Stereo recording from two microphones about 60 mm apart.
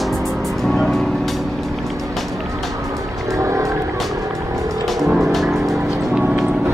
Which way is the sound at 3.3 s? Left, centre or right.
Right.